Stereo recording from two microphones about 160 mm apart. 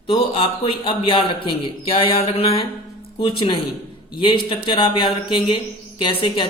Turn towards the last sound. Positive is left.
turn(degrees=30)  # may be behind; listen again after turning